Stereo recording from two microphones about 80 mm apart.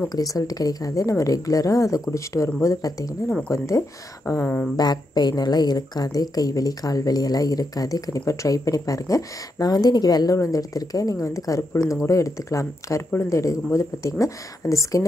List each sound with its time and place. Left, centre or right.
0.1 s a woman's voice: left
4.7 s a woman's voice: left